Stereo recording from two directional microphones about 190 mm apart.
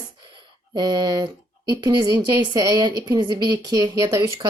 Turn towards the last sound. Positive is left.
turn(degrees=-20)  # may be behind; listen again after turning